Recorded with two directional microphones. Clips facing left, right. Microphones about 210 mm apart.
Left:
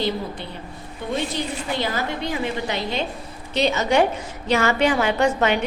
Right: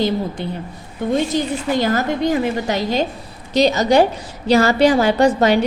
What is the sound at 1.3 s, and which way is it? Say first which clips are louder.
A woman's voice: right 7 dB; 45° right (ahead or behind).